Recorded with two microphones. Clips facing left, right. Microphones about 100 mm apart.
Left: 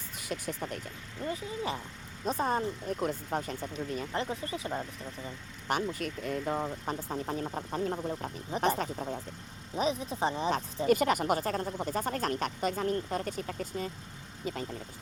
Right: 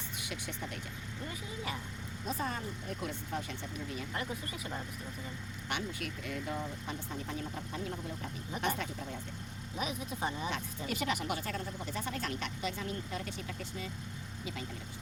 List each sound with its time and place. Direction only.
0.3 s speech: 40° left (ahead or behind)
1.2 s speech: 30° left (ahead or behind)
4.2 s speech: 30° left (ahead or behind)
10.8 s speech: 45° left (ahead or behind)